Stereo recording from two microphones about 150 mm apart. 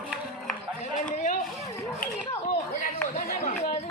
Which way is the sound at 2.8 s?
65° left (ahead or behind).